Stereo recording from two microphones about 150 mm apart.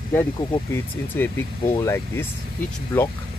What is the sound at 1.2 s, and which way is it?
Speech, 15° left (ahead or behind).